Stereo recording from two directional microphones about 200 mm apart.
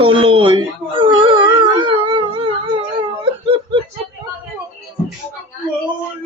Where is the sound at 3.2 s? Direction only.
25° right (ahead or behind).